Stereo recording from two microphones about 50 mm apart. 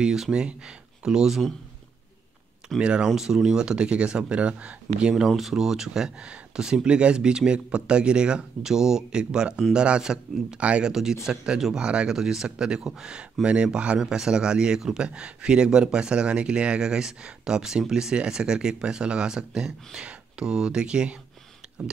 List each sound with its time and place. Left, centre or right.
0.0 s speech: centre
2.8 s speech: centre
5.2 s speech: centre; by 10.9 s right
10.9 s speech: centre